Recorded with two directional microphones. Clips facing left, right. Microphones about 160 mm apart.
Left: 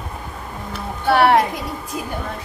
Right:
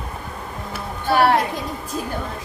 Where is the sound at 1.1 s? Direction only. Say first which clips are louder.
Left 2 dB; 65° left (ahead or behind).